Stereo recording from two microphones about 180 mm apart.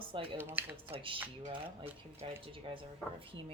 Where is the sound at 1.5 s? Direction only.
30° right (ahead or behind).